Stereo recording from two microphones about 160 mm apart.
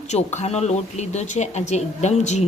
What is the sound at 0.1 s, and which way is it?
Speech, 45° left (ahead or behind).